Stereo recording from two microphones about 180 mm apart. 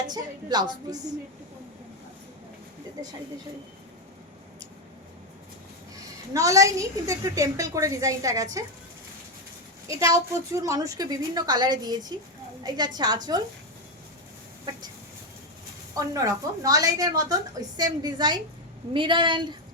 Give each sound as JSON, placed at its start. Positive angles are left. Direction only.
{"t": 0.1, "sound": "a woman's voice", "side_deg": -25}
{"t": 6.3, "sound": "a woman's voice", "side_deg": -15}
{"t": 9.8, "sound": "a woman's voice", "side_deg": -15}
{"t": 16.0, "sound": "a woman's voice", "side_deg": -20}